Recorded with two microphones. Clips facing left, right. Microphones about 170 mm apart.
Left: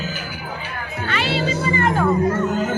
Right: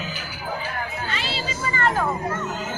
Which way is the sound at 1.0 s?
65° left (ahead or behind).